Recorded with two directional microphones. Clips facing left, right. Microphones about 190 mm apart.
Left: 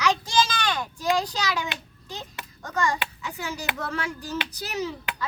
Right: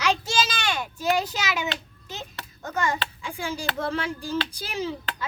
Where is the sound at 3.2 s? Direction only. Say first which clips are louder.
Right 2 dB; 25° right (ahead or behind).